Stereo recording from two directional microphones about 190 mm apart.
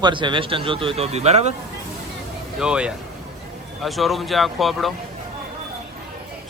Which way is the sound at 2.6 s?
5° right (ahead or behind).